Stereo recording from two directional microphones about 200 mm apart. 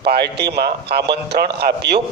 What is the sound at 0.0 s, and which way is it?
A man's voice, 55° right (ahead or behind).